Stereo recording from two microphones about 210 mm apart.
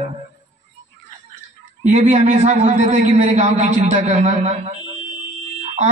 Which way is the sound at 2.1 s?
35° right (ahead or behind).